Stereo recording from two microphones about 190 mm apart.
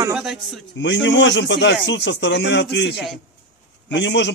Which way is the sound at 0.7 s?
70° left (ahead or behind).